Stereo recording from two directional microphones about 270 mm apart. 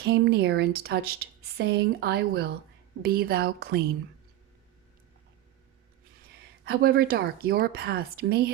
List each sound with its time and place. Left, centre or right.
0.0 s a woman's voice: right
6.7 s a woman's voice: right